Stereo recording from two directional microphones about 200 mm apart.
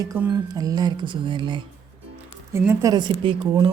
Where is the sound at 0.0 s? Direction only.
15° right (ahead or behind).